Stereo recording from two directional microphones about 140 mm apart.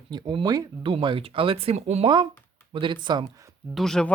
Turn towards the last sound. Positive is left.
turn(degrees=5)  # may be behind; listen again after turning